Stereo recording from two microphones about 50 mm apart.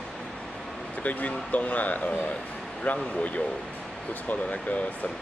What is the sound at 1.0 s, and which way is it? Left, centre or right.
Speech, left.